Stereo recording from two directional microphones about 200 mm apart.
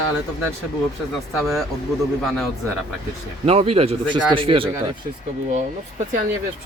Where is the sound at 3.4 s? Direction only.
30° right (ahead or behind).